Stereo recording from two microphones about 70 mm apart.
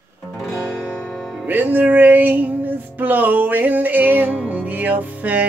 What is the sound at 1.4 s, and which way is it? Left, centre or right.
Music, right.